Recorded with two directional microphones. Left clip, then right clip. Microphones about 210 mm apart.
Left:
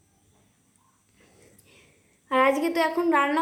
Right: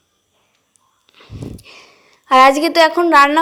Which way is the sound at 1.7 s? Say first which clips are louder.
Right 15 dB; 25° right (ahead or behind).